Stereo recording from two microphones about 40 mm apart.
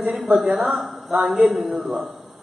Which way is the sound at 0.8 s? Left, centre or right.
Centre.